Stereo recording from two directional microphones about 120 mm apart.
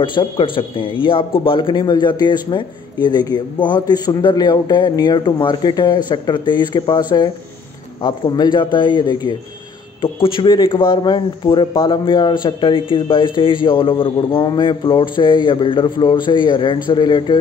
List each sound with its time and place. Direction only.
0.0 s a man's voice: 45° left (ahead or behind)